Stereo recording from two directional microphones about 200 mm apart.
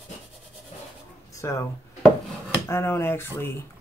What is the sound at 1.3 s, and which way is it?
Speech, 15° left (ahead or behind).